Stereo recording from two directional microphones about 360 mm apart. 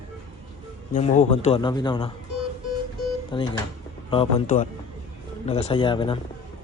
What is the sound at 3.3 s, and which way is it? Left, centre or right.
A man's voice, centre.